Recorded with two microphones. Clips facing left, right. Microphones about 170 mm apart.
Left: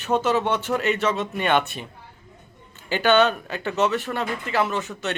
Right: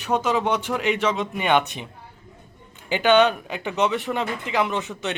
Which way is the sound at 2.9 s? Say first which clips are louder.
Right 1 dB; 15° right (ahead or behind).